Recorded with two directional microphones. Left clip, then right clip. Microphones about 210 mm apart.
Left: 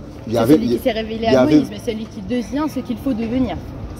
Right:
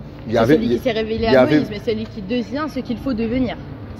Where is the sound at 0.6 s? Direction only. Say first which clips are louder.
Even; 40° right (ahead or behind).